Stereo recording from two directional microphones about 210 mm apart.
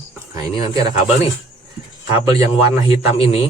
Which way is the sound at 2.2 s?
15° right (ahead or behind).